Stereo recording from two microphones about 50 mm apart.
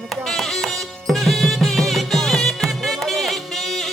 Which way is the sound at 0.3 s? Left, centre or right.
Centre.